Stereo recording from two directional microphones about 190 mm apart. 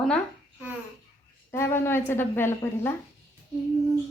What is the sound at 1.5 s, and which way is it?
A woman's voice, 15° left (ahead or behind).